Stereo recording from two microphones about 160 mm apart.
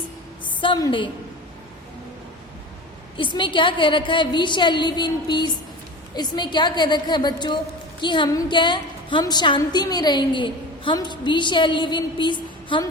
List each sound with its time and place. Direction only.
0.4 s a woman's voice: 30° left (ahead or behind)
3.2 s a woman's voice: 30° left (ahead or behind)